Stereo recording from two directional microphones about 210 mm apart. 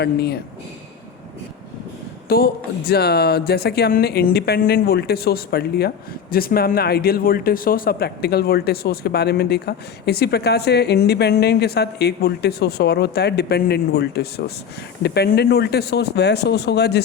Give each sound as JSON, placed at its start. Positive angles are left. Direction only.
{"t": 0.0, "sound": "speech", "side_deg": 50}
{"t": 2.3, "sound": "speech", "side_deg": 45}